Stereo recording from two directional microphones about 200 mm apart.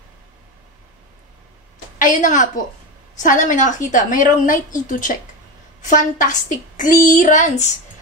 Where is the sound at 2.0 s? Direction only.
40° left (ahead or behind).